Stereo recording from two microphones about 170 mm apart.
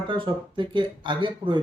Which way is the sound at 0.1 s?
30° right (ahead or behind).